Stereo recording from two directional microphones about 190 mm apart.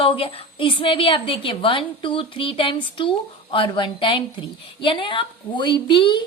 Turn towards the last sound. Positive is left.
turn(degrees=25)  # may be behind; listen again after turning